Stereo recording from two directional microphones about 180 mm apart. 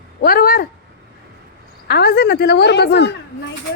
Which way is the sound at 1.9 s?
65° left (ahead or behind).